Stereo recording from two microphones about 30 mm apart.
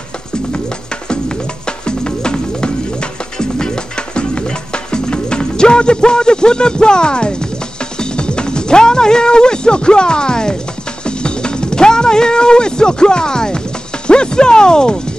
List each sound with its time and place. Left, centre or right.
1.7 s music: left
8.0 s speech: left